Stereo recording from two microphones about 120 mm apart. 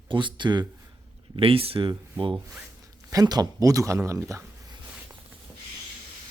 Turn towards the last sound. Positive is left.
turn(degrees=-25)  # may be behind; listen again after turning